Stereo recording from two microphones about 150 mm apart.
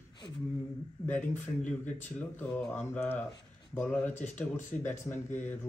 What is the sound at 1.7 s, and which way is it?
Speech, 10° left (ahead or behind).